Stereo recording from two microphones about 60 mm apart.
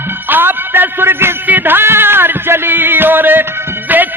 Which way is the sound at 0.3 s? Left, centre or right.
Right.